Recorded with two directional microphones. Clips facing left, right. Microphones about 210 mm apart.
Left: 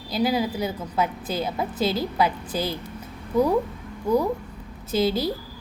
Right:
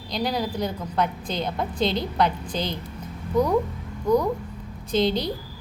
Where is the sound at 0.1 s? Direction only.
5° left (ahead or behind).